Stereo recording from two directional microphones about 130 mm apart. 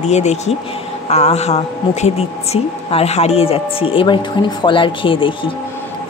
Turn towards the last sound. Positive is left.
turn(degrees=40)  # may be behind; listen again after turning